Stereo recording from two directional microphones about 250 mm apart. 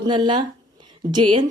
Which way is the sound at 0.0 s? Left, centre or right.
Centre.